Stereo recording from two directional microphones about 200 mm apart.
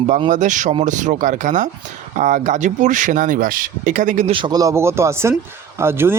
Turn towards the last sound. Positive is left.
turn(degrees=-10)  # may be behind; listen again after turning